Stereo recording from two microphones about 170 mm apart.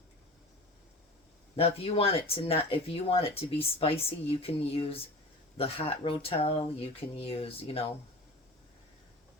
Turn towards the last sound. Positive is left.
turn(degrees=35)  # may be behind; listen again after turning